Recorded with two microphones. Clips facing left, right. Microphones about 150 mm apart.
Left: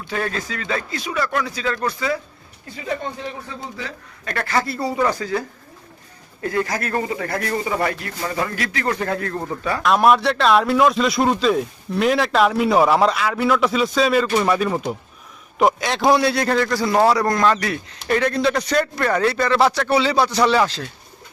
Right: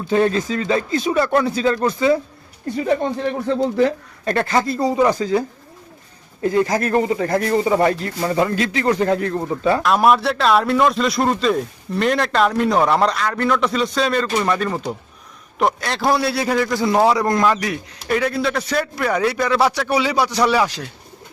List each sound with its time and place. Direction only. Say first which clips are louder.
0.1 s speech: right 8 dB; 25° right (ahead or behind)
2.7 s speech: right 7 dB; 50° right (ahead or behind)
4.3 s speech: right 4 dB; 25° right (ahead or behind)
9.8 s a man's voice: left 3 dB; centre (ahead or behind)
17.2 s a man's voice: right 1 dB; 20° right (ahead or behind)